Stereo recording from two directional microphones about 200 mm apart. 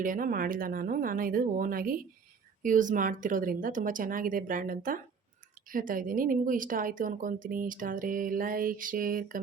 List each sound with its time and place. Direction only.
0.0 s speech: 45° right (ahead or behind)